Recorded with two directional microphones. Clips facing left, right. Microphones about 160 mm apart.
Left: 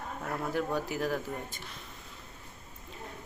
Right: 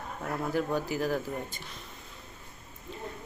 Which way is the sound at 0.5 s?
Centre (ahead or behind).